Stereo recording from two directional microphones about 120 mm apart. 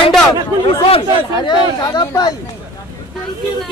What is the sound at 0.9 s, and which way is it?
Speech, 40° left (ahead or behind).